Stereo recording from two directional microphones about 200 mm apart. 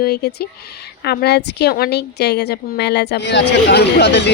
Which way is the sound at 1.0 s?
55° left (ahead or behind).